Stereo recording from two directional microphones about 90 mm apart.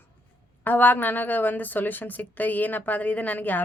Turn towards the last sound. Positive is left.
turn(degrees=20)  # may be behind; listen again after turning